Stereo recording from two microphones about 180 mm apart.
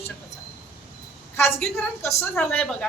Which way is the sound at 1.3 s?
15° left (ahead or behind).